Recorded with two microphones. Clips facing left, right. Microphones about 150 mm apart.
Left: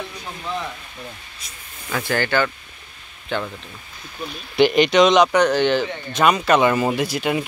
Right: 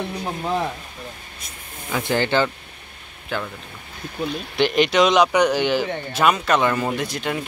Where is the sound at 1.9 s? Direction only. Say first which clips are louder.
Right 1 dB; 20° right (ahead or behind).